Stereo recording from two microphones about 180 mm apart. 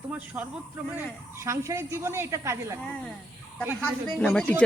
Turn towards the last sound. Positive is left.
turn(degrees=5)  # may be behind; listen again after turning